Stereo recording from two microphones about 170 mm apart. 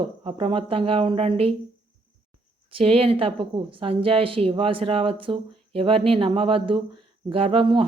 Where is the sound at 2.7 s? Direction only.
35° right (ahead or behind).